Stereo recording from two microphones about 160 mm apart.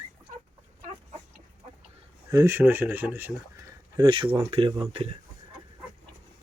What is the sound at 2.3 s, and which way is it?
Speech, 15° right (ahead or behind).